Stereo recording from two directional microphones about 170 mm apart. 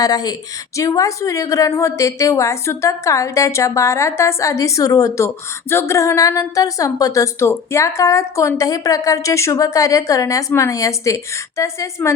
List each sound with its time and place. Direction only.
0.0 s a woman's voice: 20° left (ahead or behind)